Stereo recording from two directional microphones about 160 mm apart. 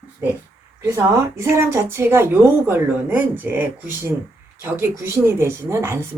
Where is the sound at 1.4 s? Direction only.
15° right (ahead or behind).